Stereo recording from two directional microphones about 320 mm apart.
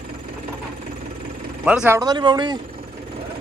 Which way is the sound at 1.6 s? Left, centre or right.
Centre.